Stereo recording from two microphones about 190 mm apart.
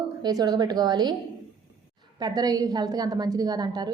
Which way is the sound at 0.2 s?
20° right (ahead or behind).